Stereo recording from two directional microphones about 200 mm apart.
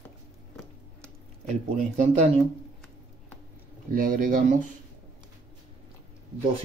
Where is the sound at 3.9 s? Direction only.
45° right (ahead or behind).